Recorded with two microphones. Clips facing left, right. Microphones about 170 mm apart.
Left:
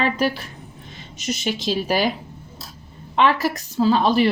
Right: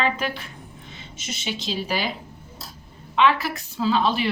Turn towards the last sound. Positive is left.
turn(degrees=40)  # may be behind; listen again after turning